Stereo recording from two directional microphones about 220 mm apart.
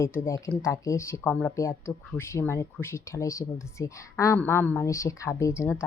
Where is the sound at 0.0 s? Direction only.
15° left (ahead or behind).